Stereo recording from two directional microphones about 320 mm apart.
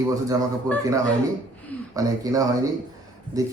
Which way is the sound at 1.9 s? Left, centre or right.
Centre.